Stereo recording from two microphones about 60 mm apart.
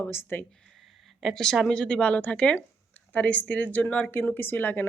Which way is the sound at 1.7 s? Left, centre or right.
Centre.